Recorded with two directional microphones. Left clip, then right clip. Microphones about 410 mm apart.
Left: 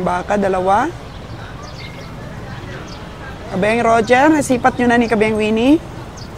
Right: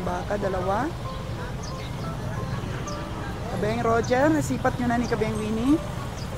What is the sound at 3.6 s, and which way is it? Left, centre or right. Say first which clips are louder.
Speech: left 11 dB; left.